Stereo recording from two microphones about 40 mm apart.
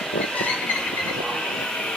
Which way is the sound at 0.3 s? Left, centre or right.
Left.